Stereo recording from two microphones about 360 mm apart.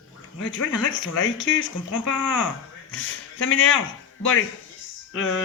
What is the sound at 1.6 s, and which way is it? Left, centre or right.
Speech, left.